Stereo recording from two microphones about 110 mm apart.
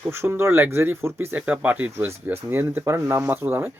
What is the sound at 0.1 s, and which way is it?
Speech, 20° right (ahead or behind).